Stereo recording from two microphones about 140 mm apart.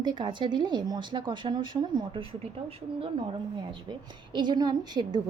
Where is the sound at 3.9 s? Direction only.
30° right (ahead or behind).